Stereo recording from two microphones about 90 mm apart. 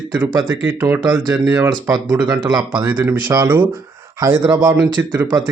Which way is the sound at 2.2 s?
50° right (ahead or behind).